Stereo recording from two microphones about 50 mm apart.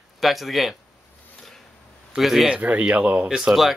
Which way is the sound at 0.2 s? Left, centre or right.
Centre.